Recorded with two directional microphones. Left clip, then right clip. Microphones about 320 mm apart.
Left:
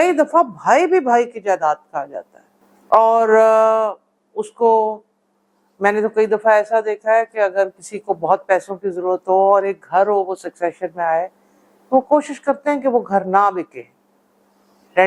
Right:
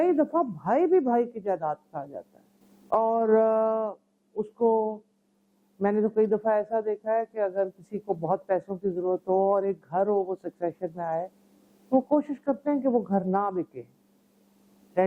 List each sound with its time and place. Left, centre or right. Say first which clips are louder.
0.0 s a woman's voice: left 10 dB; centre
5.8 s a woman's voice: left 8 dB; centre
8.0 s a woman's voice: left 11 dB; centre